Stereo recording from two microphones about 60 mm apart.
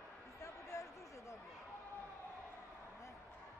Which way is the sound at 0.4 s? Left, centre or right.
Left.